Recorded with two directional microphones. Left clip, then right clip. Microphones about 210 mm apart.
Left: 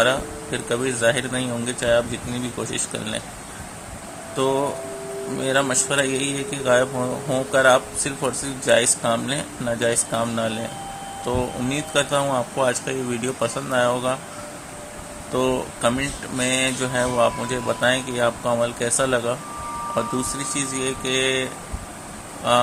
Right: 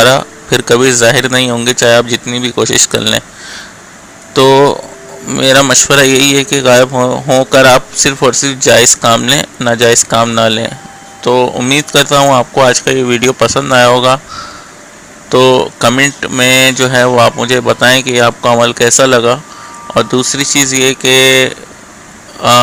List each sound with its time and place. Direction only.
0.0 s a man's voice: 35° right (ahead or behind)
4.4 s a man's voice: 35° right (ahead or behind)
15.3 s a man's voice: 35° right (ahead or behind)